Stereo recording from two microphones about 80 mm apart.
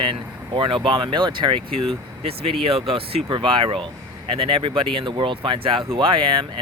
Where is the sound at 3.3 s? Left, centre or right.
Right.